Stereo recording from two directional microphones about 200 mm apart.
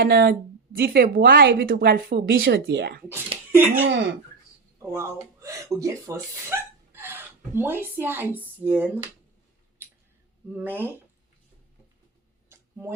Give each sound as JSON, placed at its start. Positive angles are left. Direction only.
{"t": 0.0, "sound": "a woman's voice", "side_deg": -50}
{"t": 3.5, "sound": "speech", "side_deg": -10}
{"t": 10.5, "sound": "speech", "side_deg": -10}